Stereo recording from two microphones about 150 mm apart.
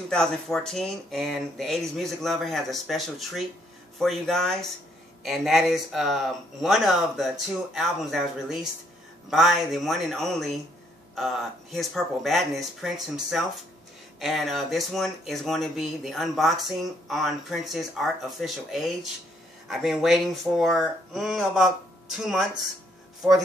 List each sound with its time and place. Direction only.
0.1 s speech: 5° left (ahead or behind)